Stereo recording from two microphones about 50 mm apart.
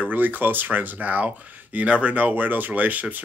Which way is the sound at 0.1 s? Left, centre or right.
Right.